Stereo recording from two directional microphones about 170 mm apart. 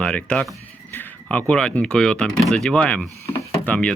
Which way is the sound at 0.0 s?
5° left (ahead or behind).